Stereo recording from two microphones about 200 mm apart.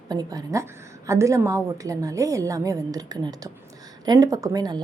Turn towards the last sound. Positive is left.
turn(degrees=-20)  # may be behind; listen again after turning